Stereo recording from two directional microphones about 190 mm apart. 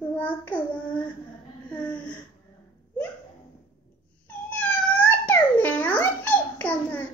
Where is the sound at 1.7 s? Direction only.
5° left (ahead or behind).